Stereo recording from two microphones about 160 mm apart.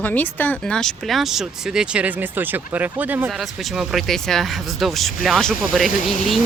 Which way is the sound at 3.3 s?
Centre (ahead or behind).